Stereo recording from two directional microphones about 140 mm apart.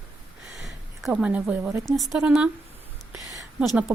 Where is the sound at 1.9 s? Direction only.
Centre (ahead or behind).